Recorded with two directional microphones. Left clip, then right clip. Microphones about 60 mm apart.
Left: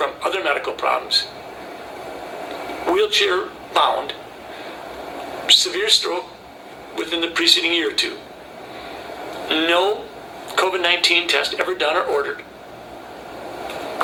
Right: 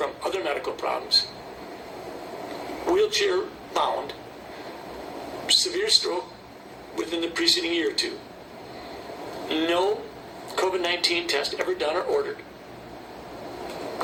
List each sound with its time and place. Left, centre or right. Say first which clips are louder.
0.0 s radio: left 6 dB; right
0.8 s speech: left 5 dB; right
2.5 s speech: left 4 dB; right
5.5 s speech: left 6 dB; right
9.4 s speech: left 6 dB; right
13.7 s a sound: left 6 dB; right